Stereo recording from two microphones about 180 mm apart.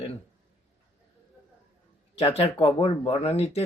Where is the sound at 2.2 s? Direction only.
35° left (ahead or behind).